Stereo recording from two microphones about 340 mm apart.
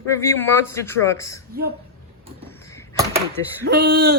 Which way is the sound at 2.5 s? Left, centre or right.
Centre.